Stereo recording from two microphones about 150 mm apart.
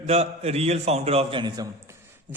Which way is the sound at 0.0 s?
45° right (ahead or behind).